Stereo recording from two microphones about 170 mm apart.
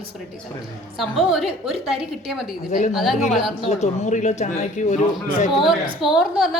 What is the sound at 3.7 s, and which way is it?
Speech, 40° left (ahead or behind).